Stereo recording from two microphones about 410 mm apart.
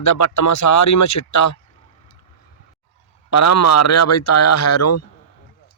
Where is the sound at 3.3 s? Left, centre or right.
Left.